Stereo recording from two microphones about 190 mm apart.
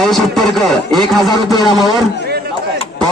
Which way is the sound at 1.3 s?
20° left (ahead or behind).